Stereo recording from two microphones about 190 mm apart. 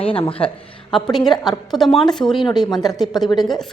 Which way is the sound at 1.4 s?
Centre (ahead or behind).